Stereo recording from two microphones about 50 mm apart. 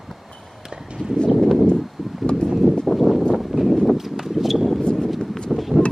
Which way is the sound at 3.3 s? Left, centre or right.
Centre.